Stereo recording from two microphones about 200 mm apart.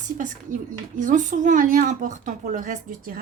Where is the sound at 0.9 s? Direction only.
40° right (ahead or behind).